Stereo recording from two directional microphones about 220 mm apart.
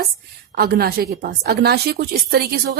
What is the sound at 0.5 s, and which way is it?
A woman's voice, 45° right (ahead or behind).